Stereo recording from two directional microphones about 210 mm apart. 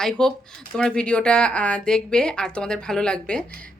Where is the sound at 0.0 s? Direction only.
Centre (ahead or behind).